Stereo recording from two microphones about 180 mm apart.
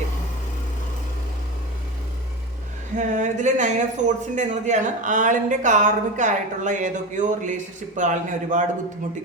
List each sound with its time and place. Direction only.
3.0 s speech: 45° right (ahead or behind)